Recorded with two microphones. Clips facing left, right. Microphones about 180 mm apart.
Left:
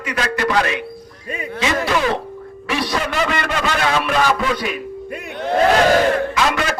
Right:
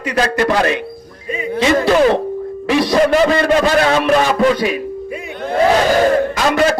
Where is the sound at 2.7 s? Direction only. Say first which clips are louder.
Right 9 dB; 40° right (ahead or behind).